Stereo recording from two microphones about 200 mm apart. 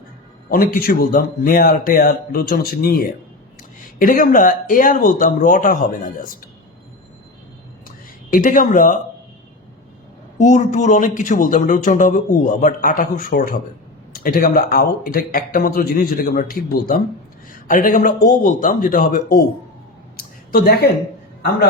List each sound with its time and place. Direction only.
0.5 s a man's voice: 50° left (ahead or behind)
8.3 s speech: 40° left (ahead or behind)
10.3 s a man's voice: 35° left (ahead or behind)
20.1 s a sound: 50° left (ahead or behind)